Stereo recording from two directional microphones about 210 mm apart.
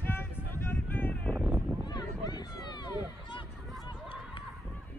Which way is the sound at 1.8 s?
20° left (ahead or behind).